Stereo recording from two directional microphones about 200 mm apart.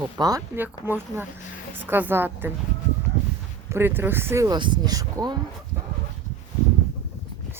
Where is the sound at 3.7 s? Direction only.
10° right (ahead or behind).